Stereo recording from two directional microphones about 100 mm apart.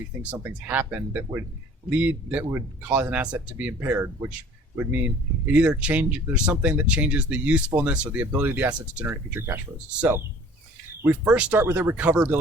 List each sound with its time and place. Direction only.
0.4 s speech: 20° right (ahead or behind)